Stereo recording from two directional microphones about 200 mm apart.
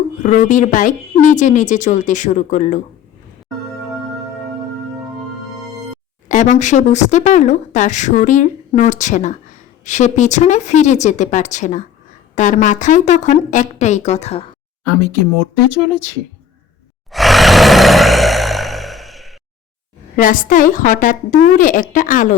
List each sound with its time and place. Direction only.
0.2 s speech: 40° left (ahead or behind)
6.2 s speech: 40° left (ahead or behind)
17.1 s roar: centre (ahead or behind)
20.1 s speech: 40° left (ahead or behind)